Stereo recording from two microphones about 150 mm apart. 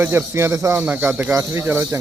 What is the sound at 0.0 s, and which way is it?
Speech, 15° right (ahead or behind).